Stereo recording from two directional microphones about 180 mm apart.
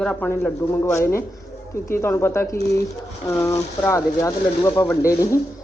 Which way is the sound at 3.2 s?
15° left (ahead or behind).